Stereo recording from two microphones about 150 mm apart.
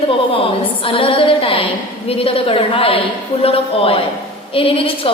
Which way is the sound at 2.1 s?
40° left (ahead or behind).